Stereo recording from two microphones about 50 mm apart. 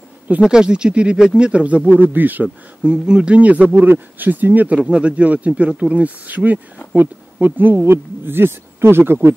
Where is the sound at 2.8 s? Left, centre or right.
Centre; by 4.7 s right.